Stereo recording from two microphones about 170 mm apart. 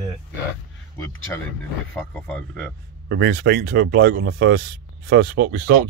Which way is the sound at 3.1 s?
90° right.